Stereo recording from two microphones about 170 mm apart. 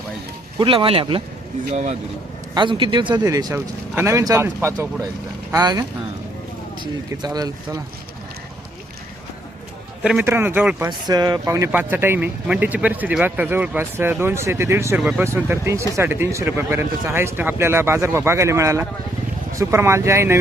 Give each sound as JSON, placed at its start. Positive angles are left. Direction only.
{"t": 0.6, "sound": "speech", "side_deg": -30}
{"t": 2.6, "sound": "speech", "side_deg": -30}
{"t": 3.2, "sound": "speech", "side_deg": -15}
{"t": 7.1, "sound": "speech", "side_deg": -20}
{"t": 10.0, "sound": "speech", "side_deg": -5}
{"t": 10.8, "sound": "speech", "side_deg": -25}